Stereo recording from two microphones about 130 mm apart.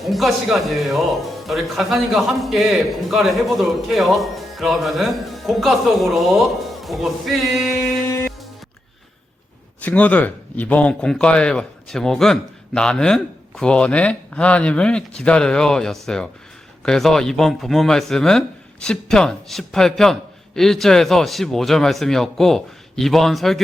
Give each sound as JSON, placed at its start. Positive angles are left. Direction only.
{"t": 0.0, "sound": "speech", "side_deg": 0}
{"t": 8.0, "sound": "music", "side_deg": 20}
{"t": 9.8, "sound": "a man's voice", "side_deg": 10}